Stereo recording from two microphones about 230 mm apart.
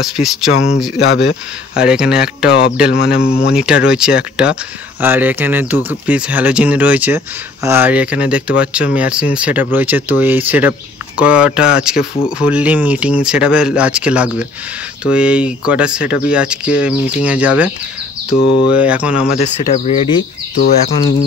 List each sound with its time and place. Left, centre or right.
0.0 s speech: centre
0.9 s speech: left
1.8 s speech: centre
2.9 s speech: left
3.2 s speech: centre
18.7 s speech: centre
19.2 s speech: left